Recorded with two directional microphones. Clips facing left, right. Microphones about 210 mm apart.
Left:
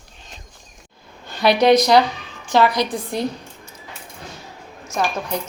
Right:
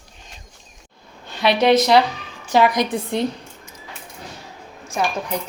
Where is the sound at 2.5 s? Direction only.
15° right (ahead or behind).